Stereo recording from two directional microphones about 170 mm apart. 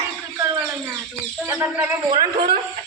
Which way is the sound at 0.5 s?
5° right (ahead or behind).